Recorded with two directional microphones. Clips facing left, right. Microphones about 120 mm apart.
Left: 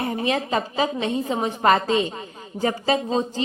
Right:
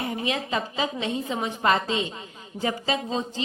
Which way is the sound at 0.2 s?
40° left (ahead or behind).